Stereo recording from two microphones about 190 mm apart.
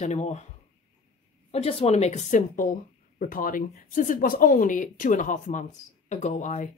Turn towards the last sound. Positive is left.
turn(degrees=40)  # may be behind; listen again after turning